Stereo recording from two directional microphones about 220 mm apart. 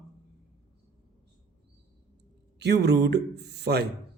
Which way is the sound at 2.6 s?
50° right (ahead or behind).